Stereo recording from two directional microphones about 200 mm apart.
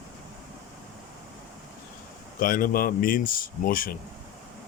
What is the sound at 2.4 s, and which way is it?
Speech, 45° left (ahead or behind).